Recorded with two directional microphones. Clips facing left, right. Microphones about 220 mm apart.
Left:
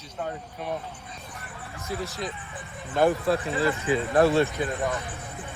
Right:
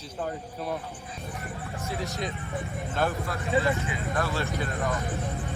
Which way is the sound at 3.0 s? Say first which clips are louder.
Left 8 dB; 20° left (ahead or behind).